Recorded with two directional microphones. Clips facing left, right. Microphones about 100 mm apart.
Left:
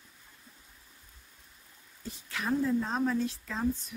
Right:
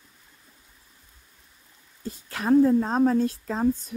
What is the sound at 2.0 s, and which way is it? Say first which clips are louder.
Speech: right 5 dB; 45° right (ahead or behind).